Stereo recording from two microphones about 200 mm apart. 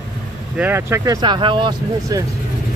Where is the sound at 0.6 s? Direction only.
10° right (ahead or behind).